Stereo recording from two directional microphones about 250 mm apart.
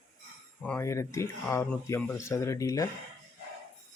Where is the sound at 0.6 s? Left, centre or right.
Centre.